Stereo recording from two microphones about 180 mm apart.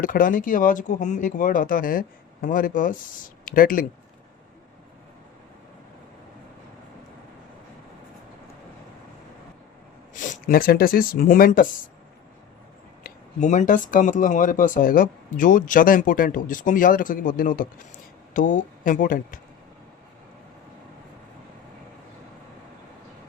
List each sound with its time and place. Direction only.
0.0 s speech: 50° left (ahead or behind)
10.2 s speech: 50° left (ahead or behind)
13.0 s speech: 50° left (ahead or behind)